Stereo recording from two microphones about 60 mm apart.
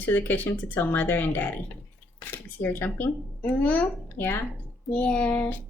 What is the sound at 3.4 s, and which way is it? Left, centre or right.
Speech, left.